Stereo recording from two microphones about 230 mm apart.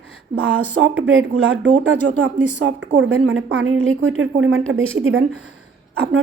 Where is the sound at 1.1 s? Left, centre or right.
Right.